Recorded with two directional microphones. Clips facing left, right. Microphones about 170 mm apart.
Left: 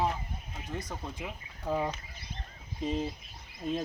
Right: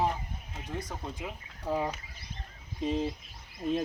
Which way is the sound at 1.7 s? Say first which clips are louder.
Even; 5° right (ahead or behind).